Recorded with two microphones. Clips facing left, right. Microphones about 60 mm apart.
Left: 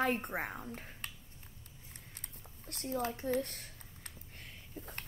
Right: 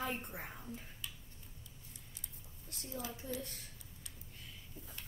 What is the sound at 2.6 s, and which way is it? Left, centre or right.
Speech, left.